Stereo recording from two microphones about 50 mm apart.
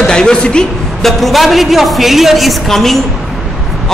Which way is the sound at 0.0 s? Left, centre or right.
Centre.